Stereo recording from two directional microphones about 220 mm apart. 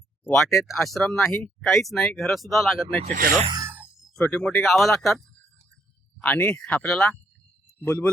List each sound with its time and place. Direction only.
0.6 s speech: centre (ahead or behind)
3.0 s speech: 35° right (ahead or behind)
3.4 s speech: 15° right (ahead or behind); by 8.1 s 5° left (ahead or behind)